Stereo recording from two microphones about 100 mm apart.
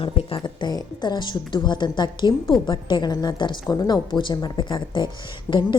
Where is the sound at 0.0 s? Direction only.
70° left (ahead or behind).